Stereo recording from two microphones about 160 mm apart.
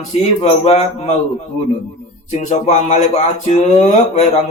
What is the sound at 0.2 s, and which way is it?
A man's voice, 45° left (ahead or behind).